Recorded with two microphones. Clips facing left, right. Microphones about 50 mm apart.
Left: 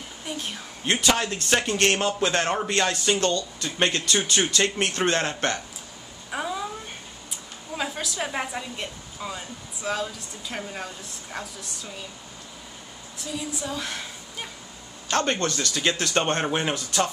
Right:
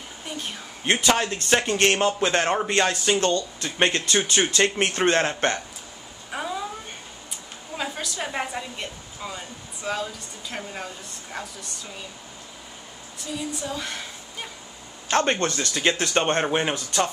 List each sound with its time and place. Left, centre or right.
0.2 s speech: centre
6.3 s cat: centre
7.2 s a woman's voice: centre
13.2 s a woman's voice: centre
15.0 s speech: right; by 17.1 s centre